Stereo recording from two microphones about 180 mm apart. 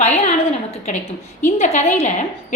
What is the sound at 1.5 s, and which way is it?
Speech, 40° left (ahead or behind).